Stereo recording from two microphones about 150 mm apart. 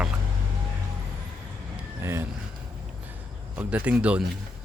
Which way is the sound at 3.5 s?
10° right (ahead or behind).